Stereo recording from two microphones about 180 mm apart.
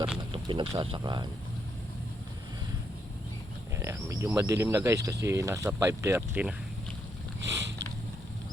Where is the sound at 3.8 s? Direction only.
15° right (ahead or behind).